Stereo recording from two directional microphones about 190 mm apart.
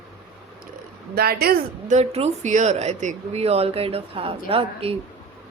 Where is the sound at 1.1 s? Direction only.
55° right (ahead or behind).